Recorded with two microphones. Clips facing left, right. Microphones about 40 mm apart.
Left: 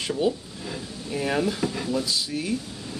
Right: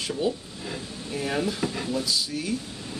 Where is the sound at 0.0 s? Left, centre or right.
Centre.